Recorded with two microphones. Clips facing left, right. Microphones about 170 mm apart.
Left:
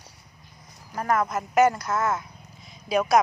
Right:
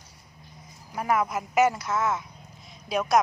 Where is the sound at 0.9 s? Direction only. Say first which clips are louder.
Left 1 dB; 10° right (ahead or behind).